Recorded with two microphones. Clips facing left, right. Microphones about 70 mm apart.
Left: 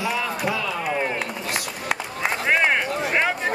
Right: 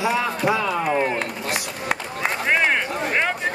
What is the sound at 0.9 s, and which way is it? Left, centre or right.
Speech, centre.